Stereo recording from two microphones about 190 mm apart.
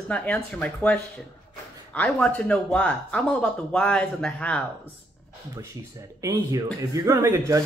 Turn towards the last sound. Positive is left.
turn(degrees=-15)  # may be behind; listen again after turning